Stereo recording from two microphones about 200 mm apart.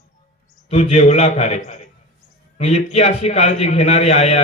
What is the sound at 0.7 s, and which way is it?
A man's voice, 35° left (ahead or behind).